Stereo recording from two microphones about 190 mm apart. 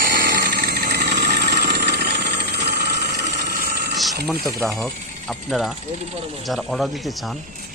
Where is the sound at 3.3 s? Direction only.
55° right (ahead or behind).